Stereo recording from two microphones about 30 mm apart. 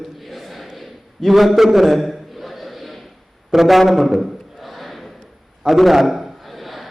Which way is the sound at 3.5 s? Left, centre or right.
Centre.